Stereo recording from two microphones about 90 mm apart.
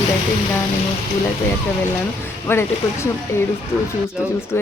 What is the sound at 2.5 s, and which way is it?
Speech, 30° left (ahead or behind).